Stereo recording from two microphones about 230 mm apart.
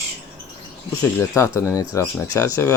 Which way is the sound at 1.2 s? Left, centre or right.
Centre.